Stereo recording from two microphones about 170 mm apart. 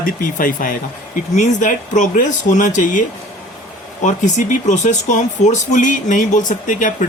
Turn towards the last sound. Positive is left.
turn(degrees=50)  # may be behind; listen again after turning